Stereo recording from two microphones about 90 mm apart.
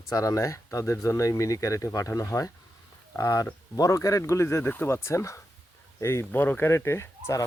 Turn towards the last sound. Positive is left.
turn(degrees=30)  # may be behind; listen again after turning